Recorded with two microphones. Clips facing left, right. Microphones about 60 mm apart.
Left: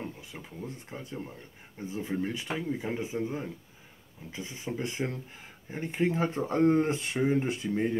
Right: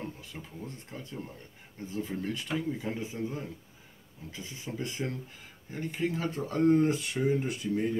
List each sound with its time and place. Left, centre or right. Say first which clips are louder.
0.2 s speech: left 1 dB; centre